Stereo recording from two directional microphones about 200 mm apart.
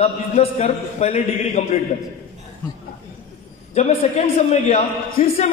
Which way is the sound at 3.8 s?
30° left (ahead or behind).